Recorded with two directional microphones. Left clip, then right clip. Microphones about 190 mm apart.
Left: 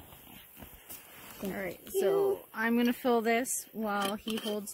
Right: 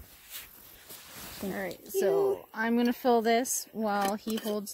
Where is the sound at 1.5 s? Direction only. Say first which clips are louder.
Right 1 dB; 30° right (ahead or behind).